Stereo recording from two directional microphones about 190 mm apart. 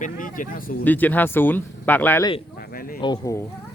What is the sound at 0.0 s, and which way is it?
Speech, 45° left (ahead or behind).